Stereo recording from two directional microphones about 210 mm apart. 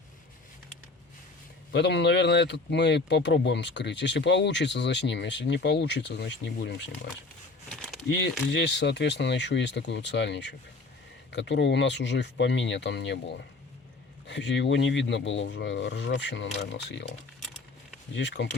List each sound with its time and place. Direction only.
1.7 s speech: 55° left (ahead or behind)
7.7 s a sound: centre (ahead or behind)
8.0 s speech: 55° left (ahead or behind)